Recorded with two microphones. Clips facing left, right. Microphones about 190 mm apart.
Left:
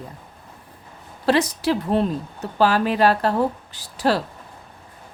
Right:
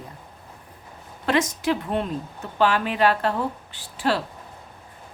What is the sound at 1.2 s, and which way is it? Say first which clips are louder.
A woman's voice: left 3 dB; 35° left (ahead or behind).